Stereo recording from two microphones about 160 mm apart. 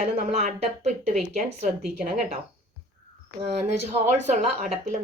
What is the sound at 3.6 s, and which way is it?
A woman's voice, 45° right (ahead or behind).